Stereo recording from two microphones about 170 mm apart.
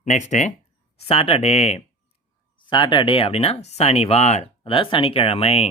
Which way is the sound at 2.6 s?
25° left (ahead or behind).